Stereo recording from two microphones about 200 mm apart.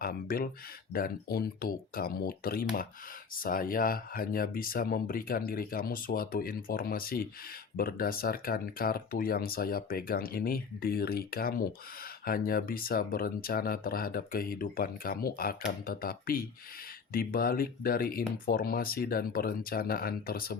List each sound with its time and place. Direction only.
0.0 s speech: 45° left (ahead or behind)